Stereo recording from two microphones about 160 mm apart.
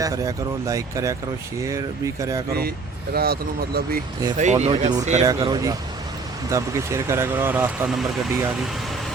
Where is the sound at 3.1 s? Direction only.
75° right (ahead or behind).